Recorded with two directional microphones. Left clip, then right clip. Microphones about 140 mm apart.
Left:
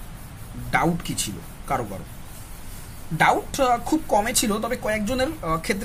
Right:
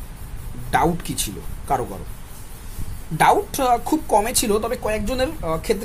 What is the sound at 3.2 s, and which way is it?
A woman's voice, 20° right (ahead or behind).